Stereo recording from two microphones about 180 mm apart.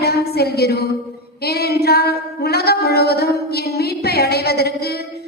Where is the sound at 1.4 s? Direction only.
60° left (ahead or behind).